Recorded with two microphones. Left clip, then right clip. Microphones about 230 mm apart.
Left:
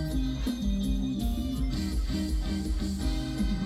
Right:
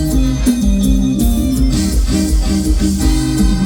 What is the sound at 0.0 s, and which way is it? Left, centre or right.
Music, right.